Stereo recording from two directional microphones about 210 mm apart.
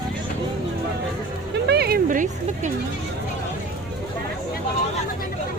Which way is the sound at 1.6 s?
50° right (ahead or behind).